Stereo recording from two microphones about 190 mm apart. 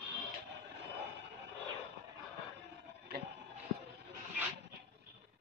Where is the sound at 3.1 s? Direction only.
55° right (ahead or behind).